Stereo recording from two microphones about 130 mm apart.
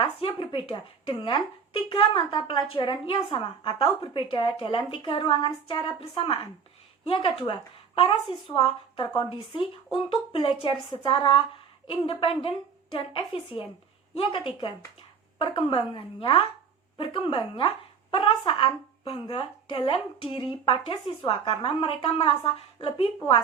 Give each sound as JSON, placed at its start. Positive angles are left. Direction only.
{"t": 0.0, "sound": "a woman's voice", "side_deg": 45}